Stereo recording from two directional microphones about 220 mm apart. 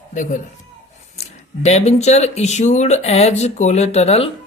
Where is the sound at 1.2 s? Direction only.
30° left (ahead or behind).